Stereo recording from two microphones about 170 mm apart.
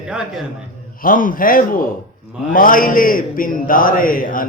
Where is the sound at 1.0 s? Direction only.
55° left (ahead or behind).